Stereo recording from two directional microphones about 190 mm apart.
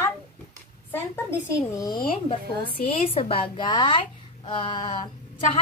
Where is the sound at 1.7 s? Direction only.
20° left (ahead or behind).